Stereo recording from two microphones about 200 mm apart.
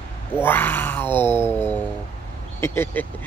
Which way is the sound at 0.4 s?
10° left (ahead or behind).